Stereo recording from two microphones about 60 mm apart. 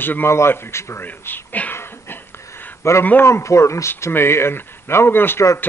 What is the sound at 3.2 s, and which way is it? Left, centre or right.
A man's voice, left.